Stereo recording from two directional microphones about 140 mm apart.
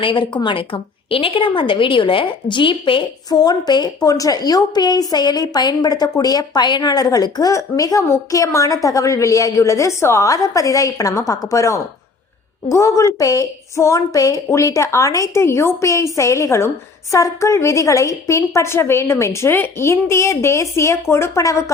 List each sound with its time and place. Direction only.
0.0 s a woman's voice: 35° left (ahead or behind)